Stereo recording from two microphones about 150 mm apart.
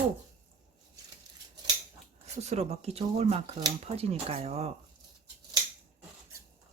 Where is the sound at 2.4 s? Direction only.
45° right (ahead or behind).